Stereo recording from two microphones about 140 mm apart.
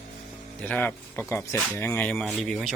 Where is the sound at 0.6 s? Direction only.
10° left (ahead or behind).